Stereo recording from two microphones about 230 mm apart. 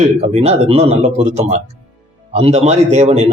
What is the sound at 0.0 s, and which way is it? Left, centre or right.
Speech, right.